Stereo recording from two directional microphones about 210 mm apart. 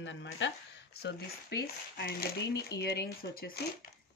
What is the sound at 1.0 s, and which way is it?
Speech, 50° left (ahead or behind).